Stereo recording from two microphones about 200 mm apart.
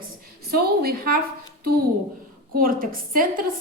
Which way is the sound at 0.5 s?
50° right (ahead or behind).